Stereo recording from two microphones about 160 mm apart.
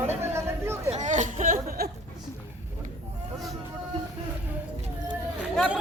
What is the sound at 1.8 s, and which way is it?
Speech, 75° right (ahead or behind).